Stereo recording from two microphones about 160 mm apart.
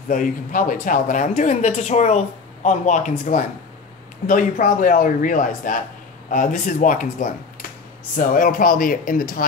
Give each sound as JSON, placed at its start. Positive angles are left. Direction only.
{"t": 0.1, "sound": "a man's voice", "side_deg": 55}